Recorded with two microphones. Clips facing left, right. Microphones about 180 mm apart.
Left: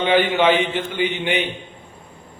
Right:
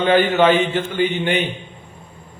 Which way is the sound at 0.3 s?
15° left (ahead or behind).